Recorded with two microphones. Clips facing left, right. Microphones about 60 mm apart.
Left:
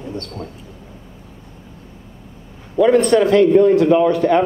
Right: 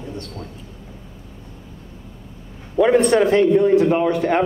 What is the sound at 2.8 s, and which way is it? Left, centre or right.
Speech, centre.